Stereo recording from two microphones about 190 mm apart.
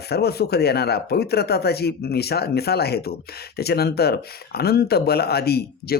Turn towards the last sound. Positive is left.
turn(degrees=55)  # may be behind; listen again after turning